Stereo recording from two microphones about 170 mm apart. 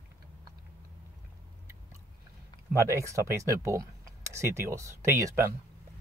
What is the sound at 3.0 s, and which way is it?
Speech, 15° right (ahead or behind).